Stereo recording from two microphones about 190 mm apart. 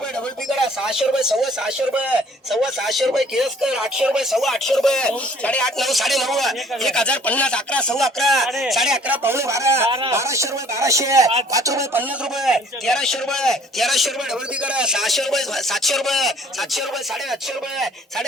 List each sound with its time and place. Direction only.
0.4 s speech: centre (ahead or behind)
12.5 s speech: centre (ahead or behind)